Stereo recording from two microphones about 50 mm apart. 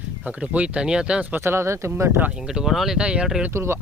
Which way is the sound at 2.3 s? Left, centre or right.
Centre.